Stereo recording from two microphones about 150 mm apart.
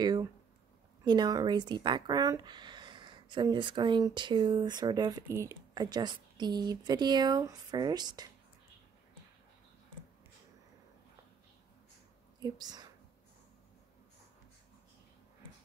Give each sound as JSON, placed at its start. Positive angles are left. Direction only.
{"t": 0.0, "sound": "speech", "side_deg": -25}
{"t": 12.4, "sound": "speech", "side_deg": -25}